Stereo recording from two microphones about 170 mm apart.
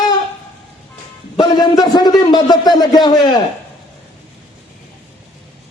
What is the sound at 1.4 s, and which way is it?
A man's voice, 25° left (ahead or behind).